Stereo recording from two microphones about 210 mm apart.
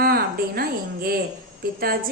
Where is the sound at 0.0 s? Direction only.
45° right (ahead or behind).